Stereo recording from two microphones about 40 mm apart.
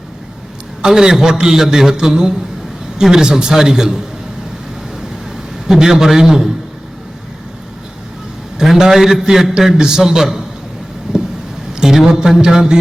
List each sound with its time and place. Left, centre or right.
0.8 s a man's voice: centre
5.6 s a man's voice: centre
8.6 s a man's voice: centre
11.1 s vehicle: centre
11.8 s a sound: centre
12.4 s a man's voice: centre